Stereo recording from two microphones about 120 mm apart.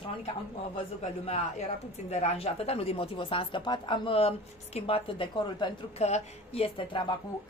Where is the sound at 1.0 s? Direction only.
65° left (ahead or behind); by 7.1 s 45° left (ahead or behind).